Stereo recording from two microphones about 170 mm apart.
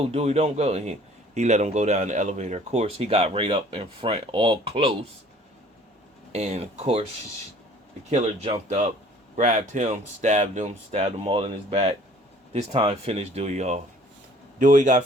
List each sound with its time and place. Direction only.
0.0 s a man's voice: 40° right (ahead or behind)
6.3 s a man's voice: 40° right (ahead or behind)
8.1 s a man's voice: 40° right (ahead or behind)